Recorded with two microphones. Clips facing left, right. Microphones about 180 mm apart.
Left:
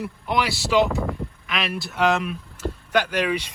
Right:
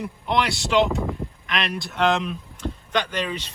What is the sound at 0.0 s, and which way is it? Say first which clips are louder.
Speech: right 1 dB; 5° left (ahead or behind).